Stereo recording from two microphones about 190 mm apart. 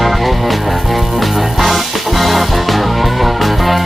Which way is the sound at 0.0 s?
Centre (ahead or behind).